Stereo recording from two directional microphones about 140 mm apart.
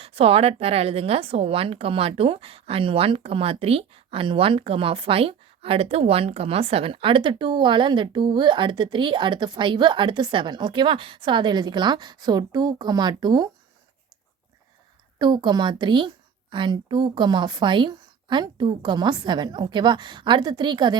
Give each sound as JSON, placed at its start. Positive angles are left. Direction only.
{"t": 0.0, "sound": "a woman's voice", "side_deg": -45}
{"t": 15.2, "sound": "a woman's voice", "side_deg": -30}